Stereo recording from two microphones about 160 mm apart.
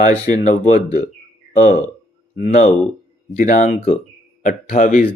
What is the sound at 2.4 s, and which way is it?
Speech, 45° left (ahead or behind).